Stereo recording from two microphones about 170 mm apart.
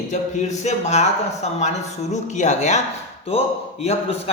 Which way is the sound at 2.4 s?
45° left (ahead or behind).